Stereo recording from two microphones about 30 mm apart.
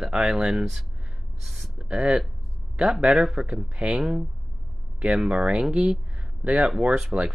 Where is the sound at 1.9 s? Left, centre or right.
Right.